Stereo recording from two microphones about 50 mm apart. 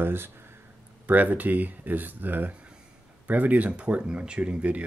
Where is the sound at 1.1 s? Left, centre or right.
Right.